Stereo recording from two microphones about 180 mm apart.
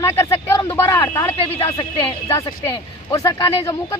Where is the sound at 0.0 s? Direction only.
15° left (ahead or behind).